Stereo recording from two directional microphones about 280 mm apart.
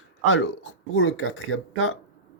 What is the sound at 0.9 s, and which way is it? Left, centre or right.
Speech, left.